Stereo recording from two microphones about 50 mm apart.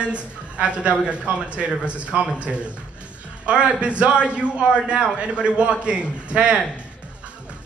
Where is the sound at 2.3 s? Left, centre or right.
Right.